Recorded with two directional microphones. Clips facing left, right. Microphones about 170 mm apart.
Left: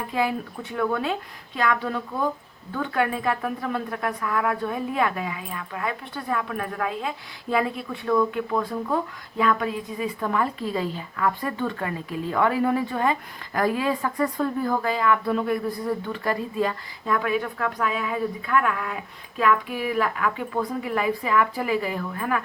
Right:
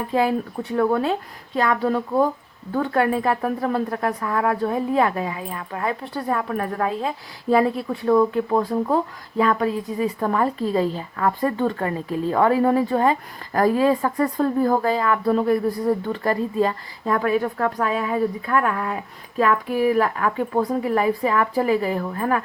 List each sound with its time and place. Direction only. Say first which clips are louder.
0.1 s a woman's voice: right 5 dB; 35° right (ahead or behind)